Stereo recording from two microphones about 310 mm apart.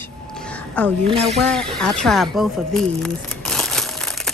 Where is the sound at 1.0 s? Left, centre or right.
Centre.